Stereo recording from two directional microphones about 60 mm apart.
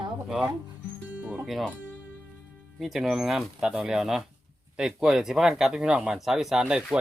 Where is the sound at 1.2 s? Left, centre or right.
Right.